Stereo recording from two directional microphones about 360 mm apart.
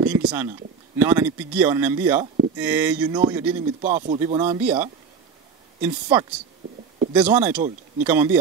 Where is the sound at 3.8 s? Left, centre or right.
Right.